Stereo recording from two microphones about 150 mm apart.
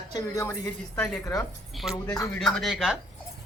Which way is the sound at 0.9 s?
10° left (ahead or behind).